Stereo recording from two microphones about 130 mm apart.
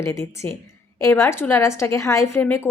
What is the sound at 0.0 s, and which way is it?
A woman's voice, 20° left (ahead or behind).